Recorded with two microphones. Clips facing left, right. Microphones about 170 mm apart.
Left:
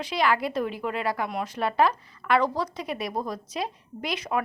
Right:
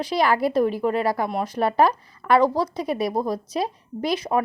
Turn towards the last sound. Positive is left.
turn(degrees=-35)  # may be behind; listen again after turning